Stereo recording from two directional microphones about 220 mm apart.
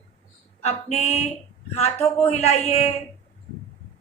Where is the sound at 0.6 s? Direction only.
30° left (ahead or behind).